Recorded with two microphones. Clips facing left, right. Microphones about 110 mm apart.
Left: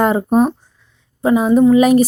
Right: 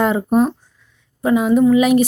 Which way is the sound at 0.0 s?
40° left (ahead or behind).